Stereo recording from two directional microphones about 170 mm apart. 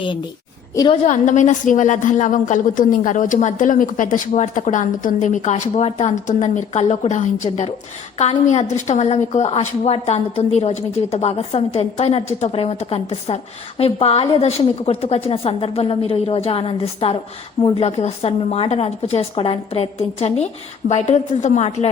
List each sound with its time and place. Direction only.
0.0 s a woman's voice: 30° left (ahead or behind)
1.0 s a woman's voice: 45° left (ahead or behind)